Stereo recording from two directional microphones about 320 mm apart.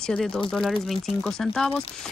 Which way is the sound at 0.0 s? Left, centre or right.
Centre.